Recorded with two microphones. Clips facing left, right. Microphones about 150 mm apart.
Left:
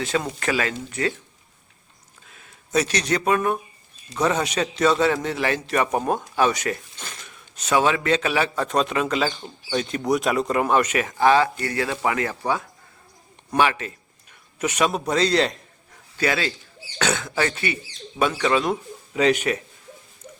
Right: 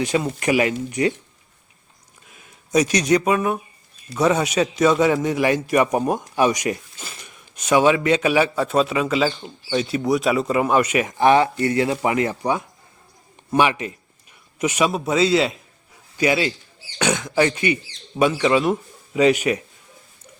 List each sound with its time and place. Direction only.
0.0 s a man's voice: 15° right (ahead or behind)
2.3 s a man's voice: 15° right (ahead or behind)